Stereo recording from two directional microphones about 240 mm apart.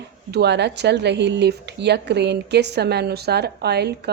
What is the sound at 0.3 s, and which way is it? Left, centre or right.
A woman's voice, right.